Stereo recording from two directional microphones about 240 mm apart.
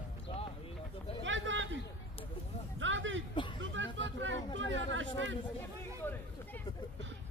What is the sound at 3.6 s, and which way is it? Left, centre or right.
Hubbub, right.